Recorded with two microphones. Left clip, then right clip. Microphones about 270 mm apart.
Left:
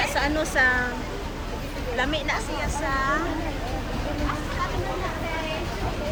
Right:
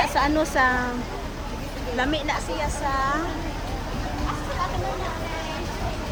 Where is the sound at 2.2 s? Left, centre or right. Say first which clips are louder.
Right 1 dB; right.